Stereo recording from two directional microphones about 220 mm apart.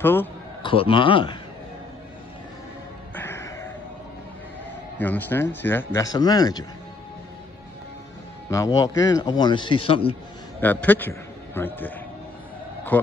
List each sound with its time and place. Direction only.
0.0 s speech: 10° left (ahead or behind)
0.6 s a man's voice: 25° left (ahead or behind)
3.2 s a sound: 10° left (ahead or behind)
4.9 s speech: 10° left (ahead or behind)
8.5 s a man's voice: 15° left (ahead or behind)
10.6 s a man's voice: 10° left (ahead or behind)
12.9 s speech: 5° left (ahead or behind)